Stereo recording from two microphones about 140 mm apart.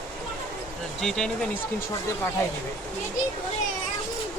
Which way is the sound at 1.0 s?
5° left (ahead or behind).